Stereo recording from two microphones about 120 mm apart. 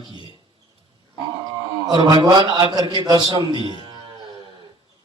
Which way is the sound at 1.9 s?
40° right (ahead or behind).